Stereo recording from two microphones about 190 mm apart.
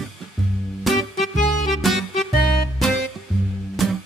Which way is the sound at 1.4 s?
40° left (ahead or behind).